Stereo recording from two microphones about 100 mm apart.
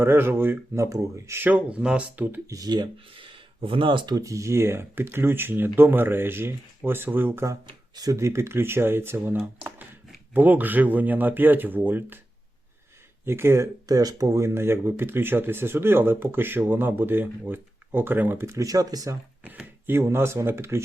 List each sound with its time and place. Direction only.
0.0 s speech: 20° right (ahead or behind)
1.5 s speech: 10° right (ahead or behind)
2.5 s speech: 40° right (ahead or behind)
3.3 s speech: 60° right (ahead or behind); by 7.5 s 20° right (ahead or behind)
7.9 s speech: 35° right (ahead or behind)
13.2 s speech: 25° right (ahead or behind)
13.8 s speech: 40° right (ahead or behind)
19.4 s speech: 15° right (ahead or behind)